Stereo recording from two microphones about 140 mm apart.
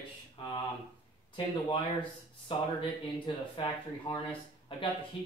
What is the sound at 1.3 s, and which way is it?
Speech, 35° left (ahead or behind).